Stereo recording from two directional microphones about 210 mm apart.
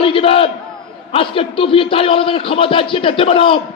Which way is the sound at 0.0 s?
25° left (ahead or behind).